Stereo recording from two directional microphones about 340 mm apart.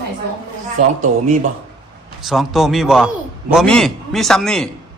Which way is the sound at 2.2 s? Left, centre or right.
Centre.